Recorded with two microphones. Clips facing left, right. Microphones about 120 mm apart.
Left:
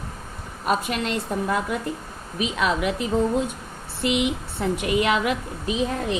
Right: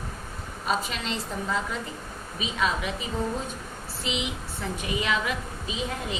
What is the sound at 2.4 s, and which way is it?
A woman's voice, 70° left (ahead or behind).